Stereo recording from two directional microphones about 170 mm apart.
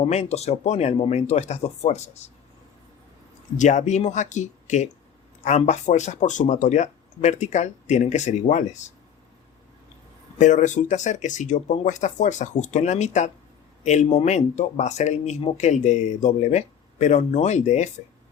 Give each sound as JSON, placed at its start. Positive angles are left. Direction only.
{"t": 0.0, "sound": "speech", "side_deg": 40}
{"t": 3.6, "sound": "speech", "side_deg": 45}
{"t": 10.3, "sound": "speech", "side_deg": 45}